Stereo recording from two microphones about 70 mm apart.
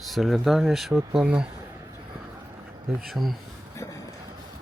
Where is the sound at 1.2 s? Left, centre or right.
Centre.